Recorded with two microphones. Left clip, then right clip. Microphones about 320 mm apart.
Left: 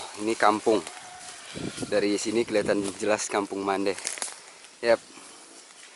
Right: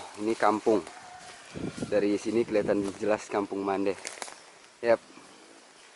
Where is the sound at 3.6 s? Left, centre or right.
Centre.